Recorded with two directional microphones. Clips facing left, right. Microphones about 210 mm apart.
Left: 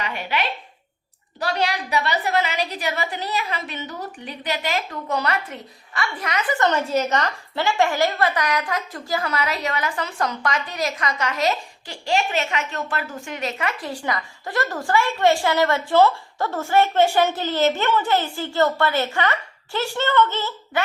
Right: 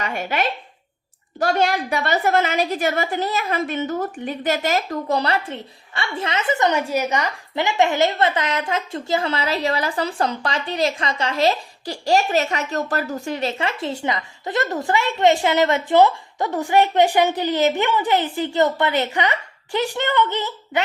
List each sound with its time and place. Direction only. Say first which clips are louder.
0.0 s a woman's voice: right 3 dB; 45° right (ahead or behind); by 20.8 s 15° right (ahead or behind)